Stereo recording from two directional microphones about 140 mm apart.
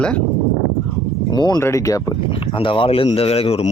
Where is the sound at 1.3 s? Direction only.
30° left (ahead or behind).